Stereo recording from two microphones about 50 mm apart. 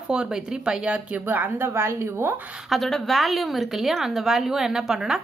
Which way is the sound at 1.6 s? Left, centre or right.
Right.